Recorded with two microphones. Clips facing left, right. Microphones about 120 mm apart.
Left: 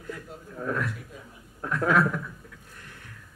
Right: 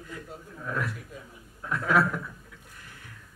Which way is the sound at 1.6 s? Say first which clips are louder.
Left 2 dB; 55° left (ahead or behind).